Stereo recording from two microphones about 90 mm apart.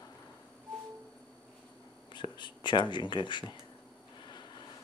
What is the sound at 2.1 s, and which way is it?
Speech, 60° left (ahead or behind).